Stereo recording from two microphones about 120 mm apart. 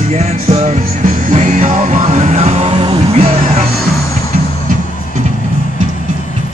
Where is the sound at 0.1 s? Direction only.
65° right (ahead or behind).